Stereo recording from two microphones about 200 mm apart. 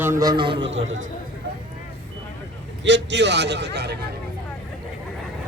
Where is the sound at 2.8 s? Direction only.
60° right (ahead or behind).